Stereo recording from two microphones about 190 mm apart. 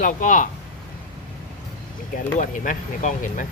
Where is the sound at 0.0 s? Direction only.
45° left (ahead or behind).